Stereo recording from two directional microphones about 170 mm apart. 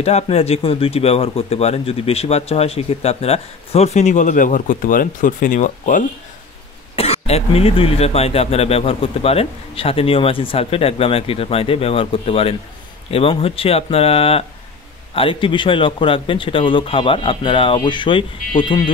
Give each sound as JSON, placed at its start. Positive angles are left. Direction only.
{"t": 0.0, "sound": "speech", "side_deg": 40}
{"t": 7.0, "sound": "a man's voice", "side_deg": 35}